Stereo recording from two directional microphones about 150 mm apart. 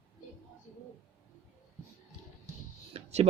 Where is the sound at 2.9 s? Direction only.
45° right (ahead or behind).